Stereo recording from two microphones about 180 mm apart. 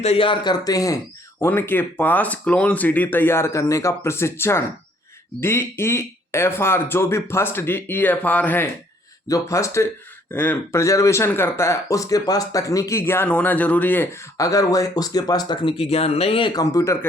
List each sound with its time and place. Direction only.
0.0 s speech: 30° left (ahead or behind); by 17.1 s 15° left (ahead or behind)